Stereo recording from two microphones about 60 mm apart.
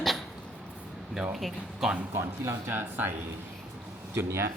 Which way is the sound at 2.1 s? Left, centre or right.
Right.